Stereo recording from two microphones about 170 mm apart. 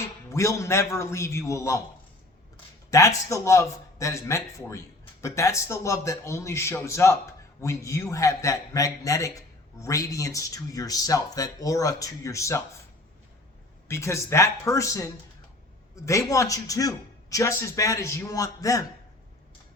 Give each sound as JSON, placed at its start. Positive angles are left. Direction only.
{"t": 0.3, "sound": "a man's voice", "side_deg": 15}
{"t": 2.9, "sound": "a man's voice", "side_deg": 20}
{"t": 13.8, "sound": "a man's voice", "side_deg": 15}